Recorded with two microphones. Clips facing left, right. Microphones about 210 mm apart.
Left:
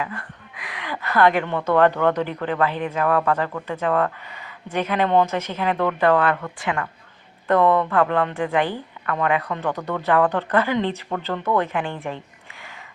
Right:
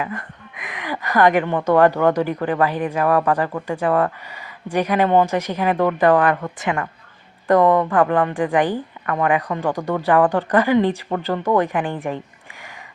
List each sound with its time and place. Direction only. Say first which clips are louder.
0.0 s a woman's voice: right 3 dB; 20° right (ahead or behind)